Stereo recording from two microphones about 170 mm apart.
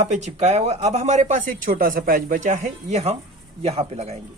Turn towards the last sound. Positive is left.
turn(degrees=-40)  # may be behind; listen again after turning